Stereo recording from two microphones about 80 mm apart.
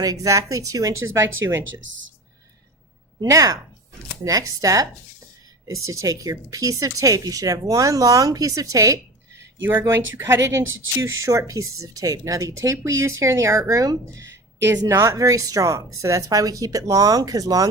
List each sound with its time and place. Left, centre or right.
0.0 s speech: right
3.2 s speech: right
10.2 s a woman's voice: right